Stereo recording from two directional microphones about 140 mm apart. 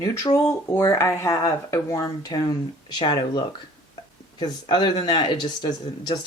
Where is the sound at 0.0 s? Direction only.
25° left (ahead or behind).